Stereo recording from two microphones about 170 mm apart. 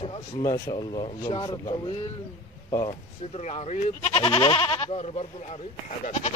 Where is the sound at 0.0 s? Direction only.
25° left (ahead or behind).